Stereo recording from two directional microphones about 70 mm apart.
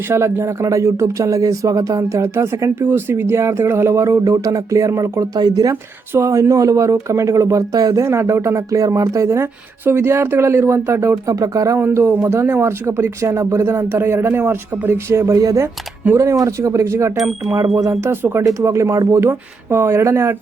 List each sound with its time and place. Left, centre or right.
0.1 s speech: right
4.2 s speech: right
6.1 s speech: right
8.0 s speech: right
11.8 s speech: right
15.4 s speech: right
17.2 s speech: centre
17.7 s speech: right
18.1 s speech: right
18.6 s speech: right